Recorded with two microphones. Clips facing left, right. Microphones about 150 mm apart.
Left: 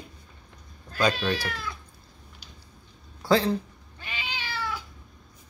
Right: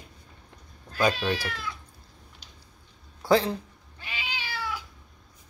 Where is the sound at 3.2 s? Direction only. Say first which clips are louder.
Even; 15° right (ahead or behind).